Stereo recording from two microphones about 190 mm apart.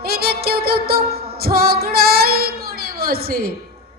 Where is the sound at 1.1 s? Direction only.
55° right (ahead or behind).